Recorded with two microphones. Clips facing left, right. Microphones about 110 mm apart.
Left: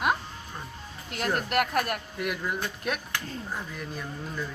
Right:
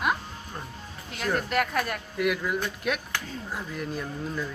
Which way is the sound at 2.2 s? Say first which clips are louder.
Right 7 dB; centre (ahead or behind).